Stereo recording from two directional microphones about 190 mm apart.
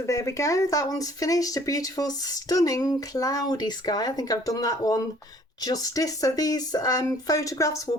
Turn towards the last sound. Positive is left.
turn(degrees=15)  # may be behind; listen again after turning